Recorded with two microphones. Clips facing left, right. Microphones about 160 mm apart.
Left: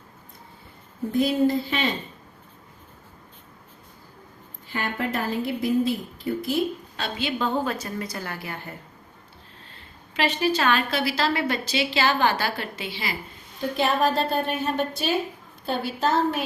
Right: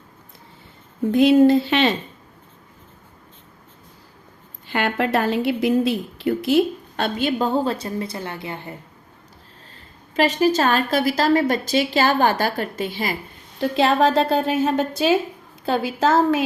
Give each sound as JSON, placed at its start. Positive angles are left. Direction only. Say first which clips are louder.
{"t": 1.1, "sound": "a woman's voice", "louder": "right 8 dB", "side_deg": -85}
{"t": 4.6, "sound": "a woman's voice", "louder": "right 6 dB", "side_deg": -80}
{"t": 6.9, "sound": "a woman's voice", "louder": "right 7 dB", "side_deg": -50}
{"t": 10.2, "sound": "a woman's voice", "louder": "right 6 dB", "side_deg": -40}
{"t": 13.6, "sound": "a woman's voice", "louder": "right 5 dB", "side_deg": -85}